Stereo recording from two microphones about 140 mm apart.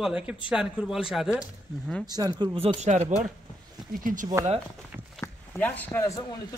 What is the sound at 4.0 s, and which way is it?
Speech, 70° right (ahead or behind).